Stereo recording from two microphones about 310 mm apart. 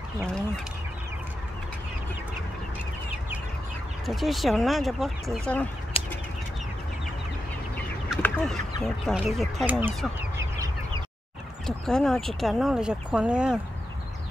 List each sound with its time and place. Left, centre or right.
4.0 s speech: centre
5.9 s bird flight: centre
7.7 s chicken: centre
8.8 s speech: centre